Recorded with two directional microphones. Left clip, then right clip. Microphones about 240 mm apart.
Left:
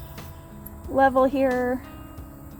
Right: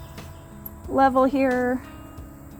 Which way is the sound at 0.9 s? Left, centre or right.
Right.